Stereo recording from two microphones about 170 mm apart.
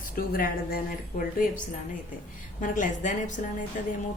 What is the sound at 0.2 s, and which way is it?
Speech, 60° left (ahead or behind).